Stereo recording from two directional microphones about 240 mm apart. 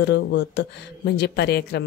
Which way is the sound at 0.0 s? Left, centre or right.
Left.